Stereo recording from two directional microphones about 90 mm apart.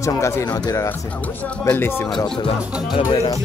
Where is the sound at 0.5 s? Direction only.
50° left (ahead or behind).